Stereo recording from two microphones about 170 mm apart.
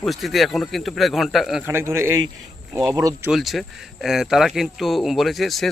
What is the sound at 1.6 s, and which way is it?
A man's voice, 15° right (ahead or behind).